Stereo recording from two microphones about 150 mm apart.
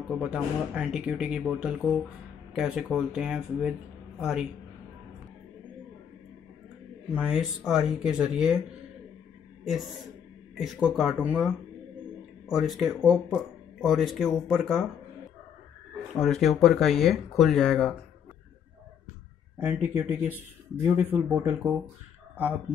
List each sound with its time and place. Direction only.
0.2 s speech: 5° right (ahead or behind)
7.1 s speech: 10° right (ahead or behind)
10.6 s speech: centre (ahead or behind)
16.3 s speech: centre (ahead or behind)
19.6 s speech: 10° right (ahead or behind)